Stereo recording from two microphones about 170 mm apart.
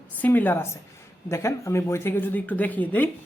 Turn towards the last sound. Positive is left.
turn(degrees=10)  # may be behind; listen again after turning